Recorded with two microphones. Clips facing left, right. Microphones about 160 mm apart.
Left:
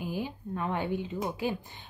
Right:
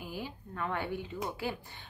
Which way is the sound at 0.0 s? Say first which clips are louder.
Left 6 dB; 20° left (ahead or behind).